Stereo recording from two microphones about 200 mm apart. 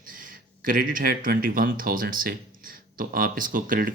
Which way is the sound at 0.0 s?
45° right (ahead or behind).